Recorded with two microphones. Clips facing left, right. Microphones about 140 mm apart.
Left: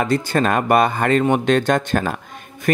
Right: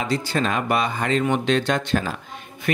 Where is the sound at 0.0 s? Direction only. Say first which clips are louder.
Left 5 dB; 50° left (ahead or behind).